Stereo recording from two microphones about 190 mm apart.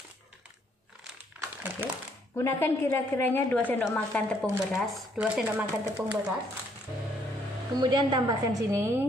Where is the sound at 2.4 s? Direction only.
10° left (ahead or behind).